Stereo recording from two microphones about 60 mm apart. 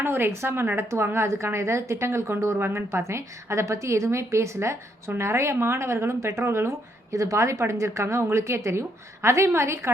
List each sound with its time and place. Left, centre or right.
0.0 s speech: right